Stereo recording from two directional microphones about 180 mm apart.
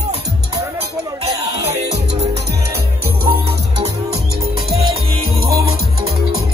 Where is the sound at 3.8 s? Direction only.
20° right (ahead or behind).